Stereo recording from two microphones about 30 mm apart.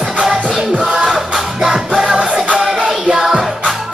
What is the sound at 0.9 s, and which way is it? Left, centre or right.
Music, right.